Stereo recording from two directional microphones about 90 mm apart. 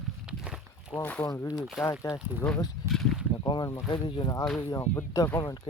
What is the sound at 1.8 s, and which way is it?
Speech, 35° left (ahead or behind).